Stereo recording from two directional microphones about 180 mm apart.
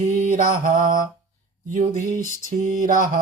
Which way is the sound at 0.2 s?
45° right (ahead or behind).